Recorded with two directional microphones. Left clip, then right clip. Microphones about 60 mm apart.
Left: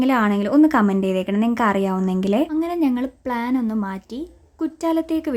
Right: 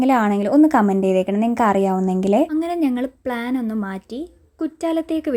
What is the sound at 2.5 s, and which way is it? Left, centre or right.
Speech, right.